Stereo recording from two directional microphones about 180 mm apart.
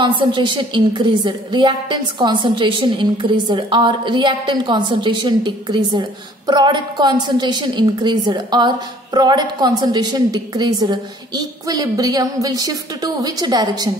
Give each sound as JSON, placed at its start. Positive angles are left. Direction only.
{"t": 0.3, "sound": "a woman's voice", "side_deg": -25}